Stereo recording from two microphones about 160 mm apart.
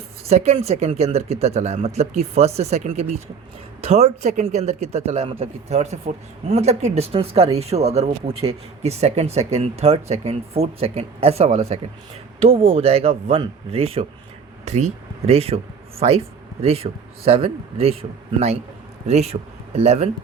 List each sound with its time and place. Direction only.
0.3 s speech: 40° right (ahead or behind)